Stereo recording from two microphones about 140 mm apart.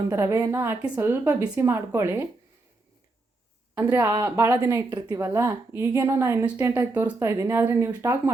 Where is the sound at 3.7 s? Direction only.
15° right (ahead or behind).